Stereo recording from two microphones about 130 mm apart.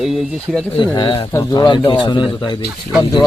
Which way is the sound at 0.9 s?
35° left (ahead or behind).